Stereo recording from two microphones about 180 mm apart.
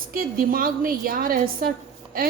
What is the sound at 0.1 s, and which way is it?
A woman's voice, 55° right (ahead or behind).